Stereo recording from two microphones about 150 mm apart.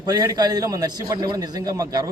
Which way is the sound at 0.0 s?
25° right (ahead or behind).